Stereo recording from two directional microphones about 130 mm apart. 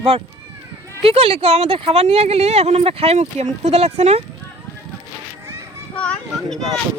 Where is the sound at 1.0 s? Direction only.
50° right (ahead or behind).